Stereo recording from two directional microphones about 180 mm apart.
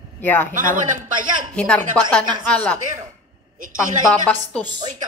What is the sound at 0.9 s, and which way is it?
Speech, 45° right (ahead or behind).